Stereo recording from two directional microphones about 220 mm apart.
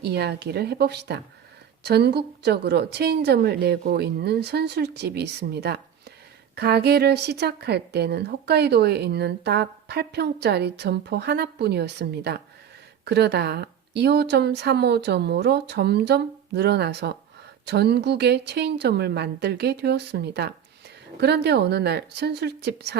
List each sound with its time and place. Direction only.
0.0 s speech: 50° right (ahead or behind)